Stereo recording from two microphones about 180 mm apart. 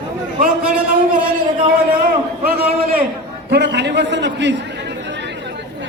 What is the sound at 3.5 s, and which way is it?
A man's voice, 70° right (ahead or behind).